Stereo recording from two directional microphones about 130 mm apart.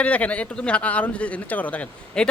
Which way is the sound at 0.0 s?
10° left (ahead or behind).